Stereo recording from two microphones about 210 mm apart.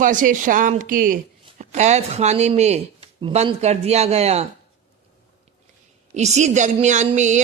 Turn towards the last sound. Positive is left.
turn(degrees=-35)  # may be behind; listen again after turning